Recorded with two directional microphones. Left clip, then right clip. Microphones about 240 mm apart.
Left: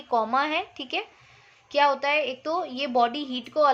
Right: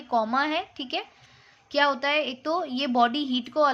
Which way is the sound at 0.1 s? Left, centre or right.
Centre.